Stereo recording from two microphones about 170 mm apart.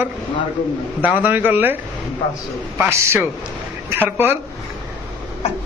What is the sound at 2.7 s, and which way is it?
Speech, 15° right (ahead or behind).